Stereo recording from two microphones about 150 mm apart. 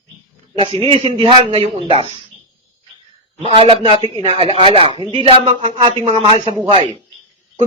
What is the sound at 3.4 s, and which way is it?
Speech, 40° right (ahead or behind).